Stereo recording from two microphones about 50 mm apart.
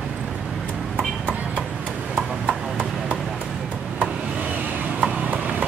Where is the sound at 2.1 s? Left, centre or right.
Right.